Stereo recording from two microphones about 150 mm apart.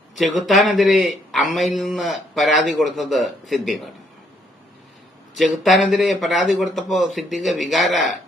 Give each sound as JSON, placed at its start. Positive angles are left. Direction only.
{"t": 0.2, "sound": "a man's voice", "side_deg": 0}
{"t": 5.3, "sound": "a man's voice", "side_deg": 0}